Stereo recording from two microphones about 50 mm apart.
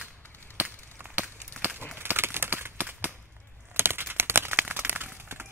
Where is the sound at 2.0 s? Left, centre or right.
Right.